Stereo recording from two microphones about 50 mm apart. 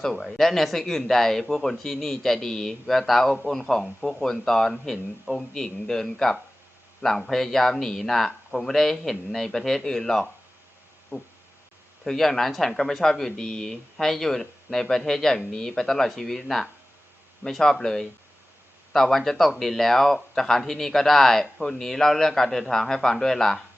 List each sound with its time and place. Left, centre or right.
0.0 s speech: centre
11.1 s a sound: left
12.0 s speech: centre
17.6 s speech: centre